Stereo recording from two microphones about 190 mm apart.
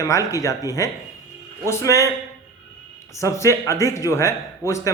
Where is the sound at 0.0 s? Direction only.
15° left (ahead or behind).